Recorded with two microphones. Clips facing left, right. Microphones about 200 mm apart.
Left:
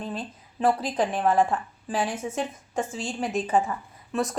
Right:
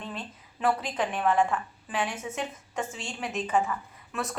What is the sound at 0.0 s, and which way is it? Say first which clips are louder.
A woman's voice: left 5 dB; 35° left (ahead or behind).